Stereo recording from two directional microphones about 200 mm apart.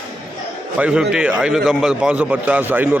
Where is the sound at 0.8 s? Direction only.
5° right (ahead or behind).